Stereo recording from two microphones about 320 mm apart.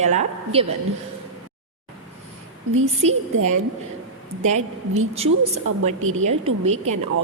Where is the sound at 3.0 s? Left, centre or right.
Centre.